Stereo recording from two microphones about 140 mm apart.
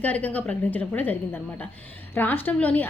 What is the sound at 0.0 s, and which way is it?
A woman's voice, 10° left (ahead or behind).